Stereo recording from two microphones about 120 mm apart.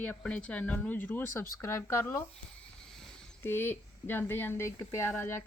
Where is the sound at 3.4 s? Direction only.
20° left (ahead or behind).